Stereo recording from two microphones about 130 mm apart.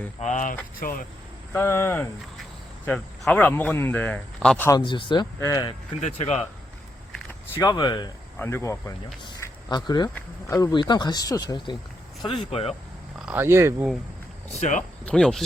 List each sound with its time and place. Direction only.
0.2 s speech: 70° left (ahead or behind)
0.8 s speech: 90° left
1.5 s speech: 20° left (ahead or behind)
4.8 s speech: 40° left (ahead or behind)
5.4 s speech: 25° left (ahead or behind)
6.0 s speech: 55° left (ahead or behind)
7.6 s speech: 30° left (ahead or behind)
8.4 s speech: 20° left (ahead or behind)
9.4 s a sound: 30° left (ahead or behind)
10.5 s speech: 30° left (ahead or behind)
12.5 s speech: 55° left (ahead or behind)
13.2 s speech: 15° right (ahead or behind)
14.5 s speech: 65° left (ahead or behind)
15.0 s speech: 5° left (ahead or behind)